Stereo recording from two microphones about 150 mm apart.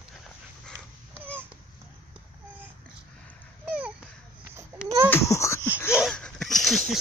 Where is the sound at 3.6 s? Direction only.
10° right (ahead or behind).